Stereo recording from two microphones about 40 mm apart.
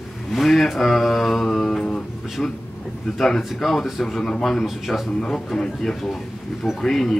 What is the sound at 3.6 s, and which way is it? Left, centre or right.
Speech, centre.